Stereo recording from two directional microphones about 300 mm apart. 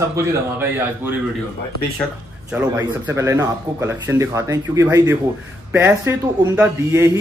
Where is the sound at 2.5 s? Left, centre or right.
Centre.